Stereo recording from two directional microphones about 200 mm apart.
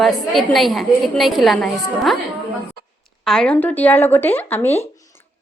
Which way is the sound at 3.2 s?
5° left (ahead or behind).